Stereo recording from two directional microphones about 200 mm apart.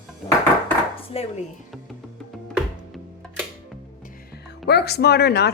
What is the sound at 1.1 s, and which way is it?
Speech, 30° left (ahead or behind).